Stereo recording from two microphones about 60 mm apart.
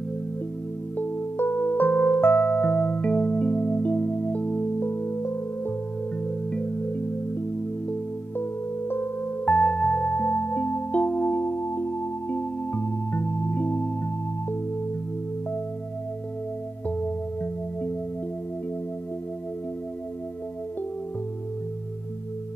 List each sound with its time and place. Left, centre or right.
1.4 s music: left
4.7 s music: left
6.2 s music: centre
8.4 s music: left
9.5 s music: centre
10.1 s music: left
12.7 s music: left
16.8 s music: left